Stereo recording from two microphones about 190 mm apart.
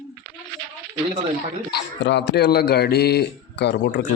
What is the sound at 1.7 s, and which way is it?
A man's voice, 65° left (ahead or behind).